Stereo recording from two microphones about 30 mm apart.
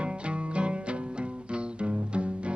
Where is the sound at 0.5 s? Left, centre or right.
Right.